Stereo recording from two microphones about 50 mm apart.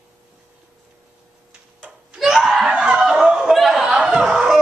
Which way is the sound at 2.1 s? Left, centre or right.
Centre.